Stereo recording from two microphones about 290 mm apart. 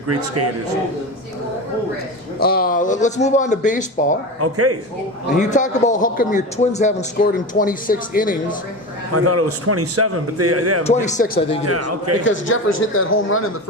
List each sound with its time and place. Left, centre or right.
0.1 s a man's voice: right
2.4 s a man's voice: left
4.4 s a man's voice: right
5.4 s a man's voice: left
9.1 s a man's voice: right
10.8 s a man's voice: left
11.6 s a man's voice: right
12.2 s a man's voice: left